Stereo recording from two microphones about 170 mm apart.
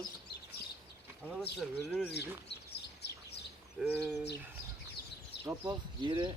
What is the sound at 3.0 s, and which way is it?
Bird, 75° left (ahead or behind).